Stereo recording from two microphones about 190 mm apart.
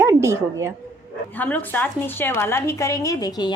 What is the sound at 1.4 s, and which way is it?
A woman's voice, 10° left (ahead or behind).